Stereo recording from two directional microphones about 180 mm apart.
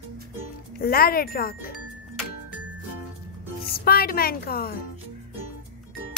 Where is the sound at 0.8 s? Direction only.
55° left (ahead or behind).